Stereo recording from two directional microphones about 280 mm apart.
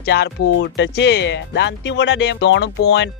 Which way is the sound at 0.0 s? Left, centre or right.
Left.